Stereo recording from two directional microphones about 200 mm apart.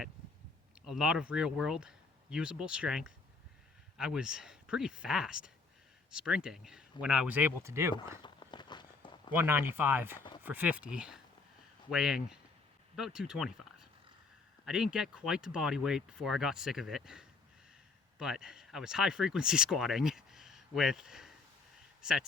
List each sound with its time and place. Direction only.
0.9 s speech: 5° right (ahead or behind)
8.2 s walk: 20° left (ahead or behind)
9.3 s speech: 10° right (ahead or behind)